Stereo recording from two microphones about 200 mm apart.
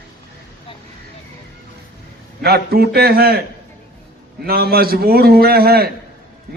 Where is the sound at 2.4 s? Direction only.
50° right (ahead or behind).